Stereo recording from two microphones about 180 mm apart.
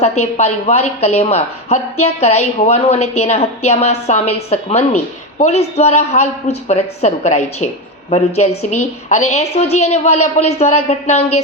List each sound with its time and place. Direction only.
0.0 s speech: 40° left (ahead or behind)